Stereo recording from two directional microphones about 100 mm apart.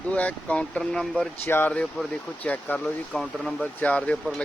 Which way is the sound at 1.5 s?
25° left (ahead or behind).